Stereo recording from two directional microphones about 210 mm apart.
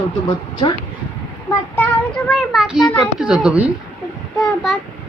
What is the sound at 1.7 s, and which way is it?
A child's voice, 5° left (ahead or behind).